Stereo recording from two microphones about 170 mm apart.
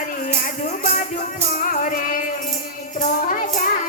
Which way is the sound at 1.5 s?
50° left (ahead or behind).